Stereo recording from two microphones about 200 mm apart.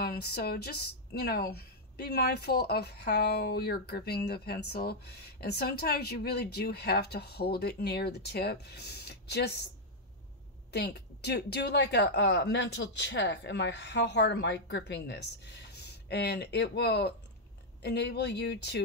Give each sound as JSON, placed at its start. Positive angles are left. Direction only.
{"t": 0.0, "sound": "a woman's voice", "side_deg": 50}
{"t": 10.7, "sound": "a woman's voice", "side_deg": 55}